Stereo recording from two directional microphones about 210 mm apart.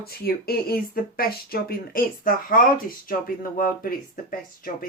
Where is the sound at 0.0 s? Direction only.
45° left (ahead or behind).